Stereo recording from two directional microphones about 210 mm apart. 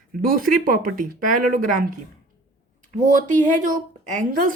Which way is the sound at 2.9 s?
35° right (ahead or behind).